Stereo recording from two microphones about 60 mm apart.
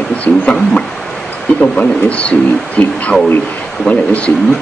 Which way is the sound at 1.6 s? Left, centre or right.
Left.